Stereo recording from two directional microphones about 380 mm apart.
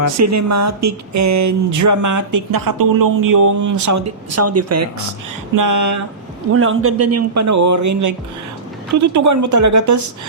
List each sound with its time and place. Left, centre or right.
0.2 s speech: right
6.5 s speech: right